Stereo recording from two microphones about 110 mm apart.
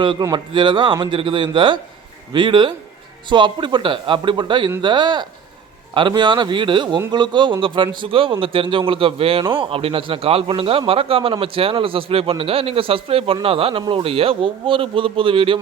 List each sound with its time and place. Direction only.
0.2 s speech: 35° right (ahead or behind)
0.5 s a man's voice: 45° right (ahead or behind)